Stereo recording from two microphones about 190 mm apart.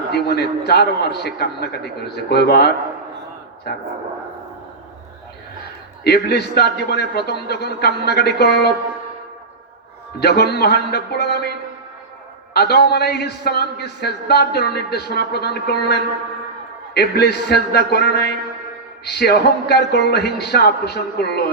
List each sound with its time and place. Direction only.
0.1 s a man's voice: 60° left (ahead or behind)
6.1 s a man's voice: 60° left (ahead or behind)
10.2 s a man's voice: 60° left (ahead or behind)
12.5 s a man's voice: 55° left (ahead or behind)